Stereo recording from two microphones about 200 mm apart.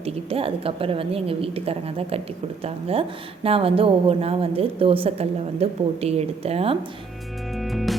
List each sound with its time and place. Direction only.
0.0 s a woman's voice: 30° right (ahead or behind)
7.6 s music: centre (ahead or behind)